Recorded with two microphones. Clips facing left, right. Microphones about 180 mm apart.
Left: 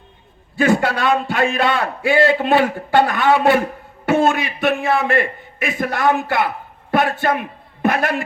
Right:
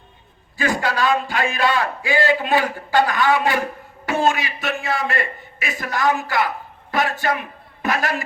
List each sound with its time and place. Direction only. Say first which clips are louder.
0.5 s a man's voice: left 6 dB; 60° left (ahead or behind)